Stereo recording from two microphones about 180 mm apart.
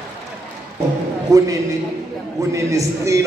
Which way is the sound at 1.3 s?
20° right (ahead or behind).